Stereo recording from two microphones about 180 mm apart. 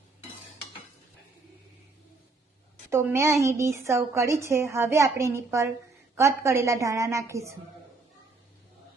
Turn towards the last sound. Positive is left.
turn(degrees=-15)  # may be behind; listen again after turning